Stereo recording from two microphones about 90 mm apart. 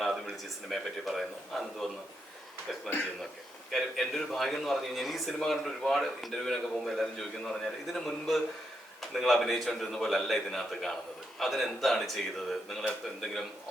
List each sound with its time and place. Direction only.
0.0 s a man's voice: centre (ahead or behind)
3.7 s a man's voice: 5° left (ahead or behind)